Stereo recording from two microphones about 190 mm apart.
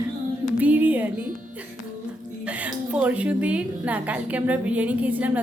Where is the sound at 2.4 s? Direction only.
5° right (ahead or behind).